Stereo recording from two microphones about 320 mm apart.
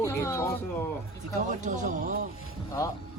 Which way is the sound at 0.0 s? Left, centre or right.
Centre.